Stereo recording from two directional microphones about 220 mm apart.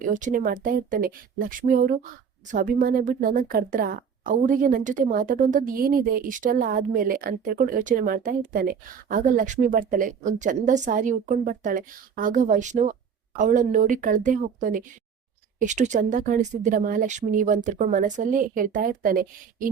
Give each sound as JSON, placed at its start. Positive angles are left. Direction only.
{"t": 0.0, "sound": "a woman's voice", "side_deg": -35}